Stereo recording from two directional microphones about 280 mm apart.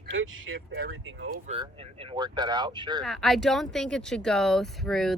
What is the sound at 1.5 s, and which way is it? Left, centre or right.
Speech, centre.